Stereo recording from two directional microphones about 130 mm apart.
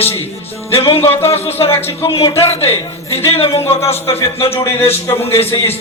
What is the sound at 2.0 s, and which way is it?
Speech, 45° left (ahead or behind).